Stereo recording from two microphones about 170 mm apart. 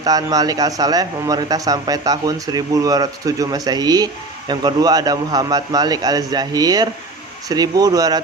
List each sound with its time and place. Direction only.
0.0 s a man's voice: 20° right (ahead or behind)